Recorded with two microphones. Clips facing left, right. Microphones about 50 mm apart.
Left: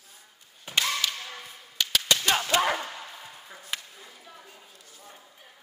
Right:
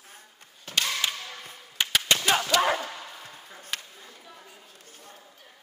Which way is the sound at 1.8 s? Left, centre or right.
Right.